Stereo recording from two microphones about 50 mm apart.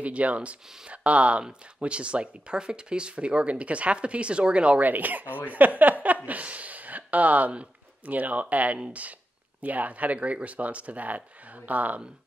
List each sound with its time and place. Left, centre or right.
0.0 s speech: right
4.8 s speech: right